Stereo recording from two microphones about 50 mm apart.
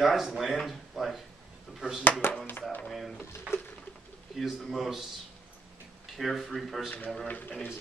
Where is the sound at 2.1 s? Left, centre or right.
Left.